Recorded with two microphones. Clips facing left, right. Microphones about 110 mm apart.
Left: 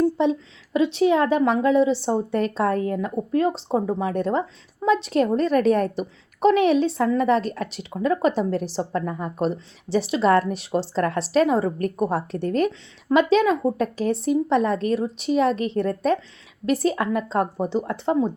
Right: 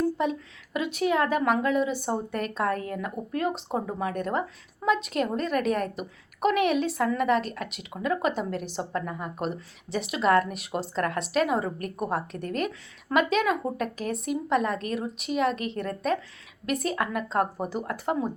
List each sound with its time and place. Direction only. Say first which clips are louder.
0.2 s a woman's voice: left 6 dB; 30° left (ahead or behind)